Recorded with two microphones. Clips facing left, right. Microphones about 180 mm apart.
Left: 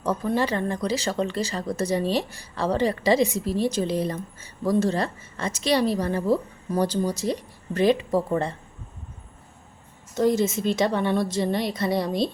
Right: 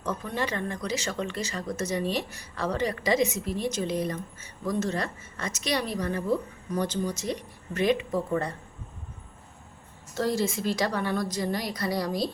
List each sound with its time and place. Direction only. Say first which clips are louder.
0.0 s speech: left 7 dB; 35° left (ahead or behind)
10.2 s speech: left 5 dB; 20° left (ahead or behind)